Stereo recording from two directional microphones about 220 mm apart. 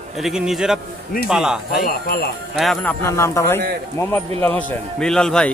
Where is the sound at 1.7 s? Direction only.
45° left (ahead or behind).